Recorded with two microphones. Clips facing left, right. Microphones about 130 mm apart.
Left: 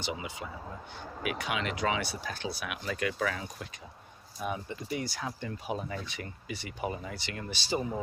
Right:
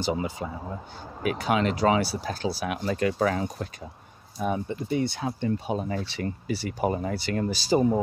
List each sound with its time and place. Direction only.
0.0 s speech: 40° right (ahead or behind)